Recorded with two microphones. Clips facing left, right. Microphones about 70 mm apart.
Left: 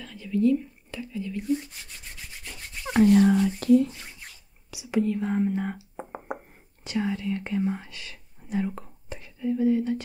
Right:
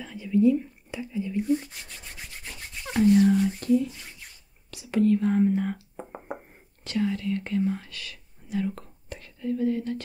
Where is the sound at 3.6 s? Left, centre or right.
Left.